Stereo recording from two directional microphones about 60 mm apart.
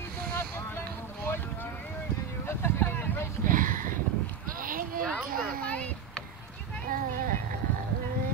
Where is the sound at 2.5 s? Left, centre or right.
Left.